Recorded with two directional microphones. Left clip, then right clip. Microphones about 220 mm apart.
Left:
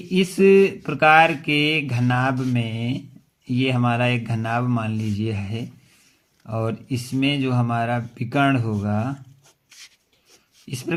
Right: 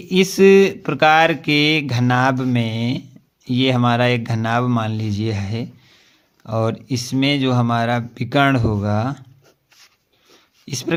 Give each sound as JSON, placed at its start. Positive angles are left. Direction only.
{"t": 0.1, "sound": "speech", "side_deg": -30}
{"t": 10.7, "sound": "speech", "side_deg": -30}